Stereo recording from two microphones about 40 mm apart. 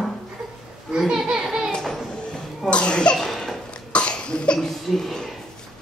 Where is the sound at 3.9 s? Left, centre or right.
Left.